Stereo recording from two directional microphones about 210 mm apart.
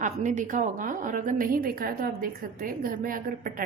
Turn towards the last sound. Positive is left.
turn(degrees=-40)  # may be behind; listen again after turning